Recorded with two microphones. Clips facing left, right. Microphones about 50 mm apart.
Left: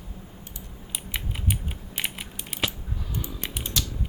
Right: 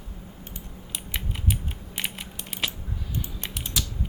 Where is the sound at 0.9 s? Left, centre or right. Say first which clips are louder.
Even; centre.